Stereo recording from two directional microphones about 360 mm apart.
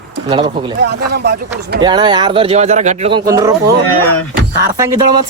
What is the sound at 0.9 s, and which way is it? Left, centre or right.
Speech, right.